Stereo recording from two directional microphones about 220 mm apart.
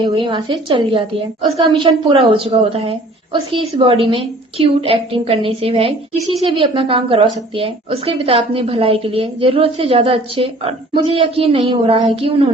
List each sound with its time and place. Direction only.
0.0 s a woman's voice: 20° right (ahead or behind)